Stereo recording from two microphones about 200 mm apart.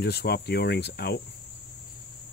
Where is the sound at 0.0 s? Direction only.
55° left (ahead or behind).